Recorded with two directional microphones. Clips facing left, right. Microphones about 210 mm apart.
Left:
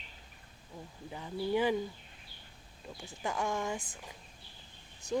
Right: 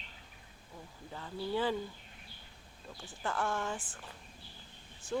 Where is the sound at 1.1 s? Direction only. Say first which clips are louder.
Left 3 dB; 15° left (ahead or behind).